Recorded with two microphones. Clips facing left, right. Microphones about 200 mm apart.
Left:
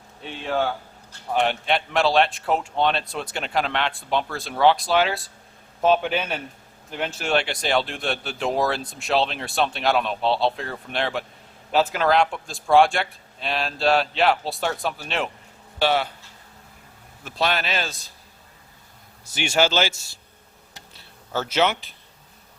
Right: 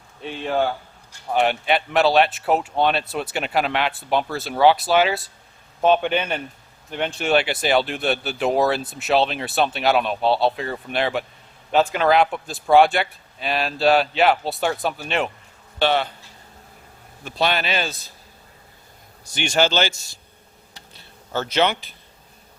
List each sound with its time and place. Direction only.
1.3 s a man's voice: 5° right (ahead or behind)
17.2 s speech: centre (ahead or behind)
19.3 s a man's voice: 5° left (ahead or behind)
20.9 s a man's voice: 5° left (ahead or behind)